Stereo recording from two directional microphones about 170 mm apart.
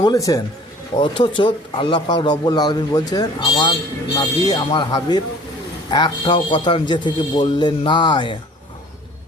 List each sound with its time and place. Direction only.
0.0 s speech: 20° left (ahead or behind)